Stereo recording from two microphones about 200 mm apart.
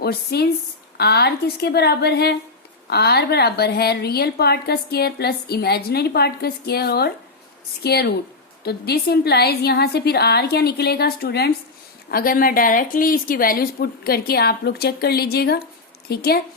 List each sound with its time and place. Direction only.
0.0 s a woman's voice: 50° left (ahead or behind)